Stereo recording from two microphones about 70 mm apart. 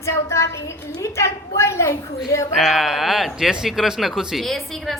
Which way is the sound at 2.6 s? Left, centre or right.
Centre.